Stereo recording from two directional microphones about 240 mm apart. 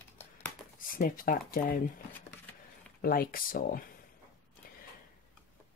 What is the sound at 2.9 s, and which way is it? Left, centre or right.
Speech, left.